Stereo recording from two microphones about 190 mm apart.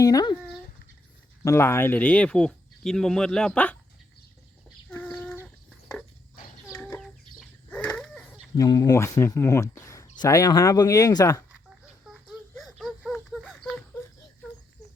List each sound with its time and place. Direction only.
0.0 s speech: 20° left (ahead or behind)
1.5 s speech: 15° left (ahead or behind)
4.9 s chicken: 5° left (ahead or behind)
6.7 s chicken: 5° left (ahead or behind)
8.5 s speech: 20° left (ahead or behind)
12.0 s a sound: 5° right (ahead or behind)